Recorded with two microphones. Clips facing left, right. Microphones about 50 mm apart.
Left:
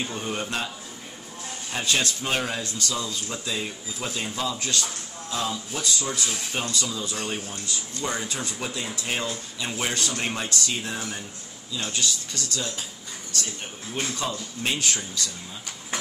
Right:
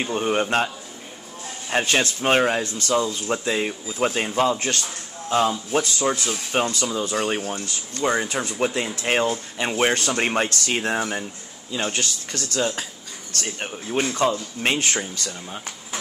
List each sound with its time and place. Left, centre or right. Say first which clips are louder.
0.0 s speech: right 8 dB; right
1.7 s speech: right 5 dB; right
14.1 s speech: right 8 dB; right